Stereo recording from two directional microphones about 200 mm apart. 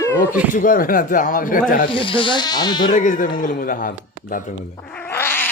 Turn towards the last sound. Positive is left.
turn(degrees=10)  # may be behind; listen again after turning